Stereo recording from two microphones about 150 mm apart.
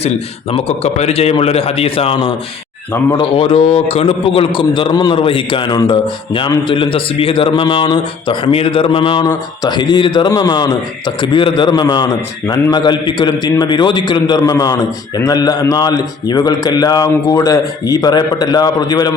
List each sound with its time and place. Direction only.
0.5 s a man's voice: 45° left (ahead or behind); by 19.1 s 25° left (ahead or behind)